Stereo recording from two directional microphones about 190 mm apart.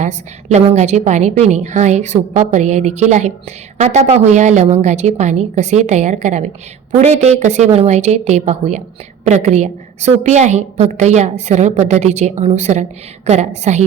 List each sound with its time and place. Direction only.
0.0 s a woman's voice: 40° right (ahead or behind)